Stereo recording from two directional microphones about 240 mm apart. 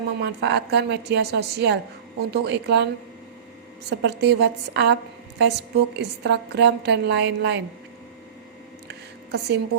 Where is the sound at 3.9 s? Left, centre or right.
Right.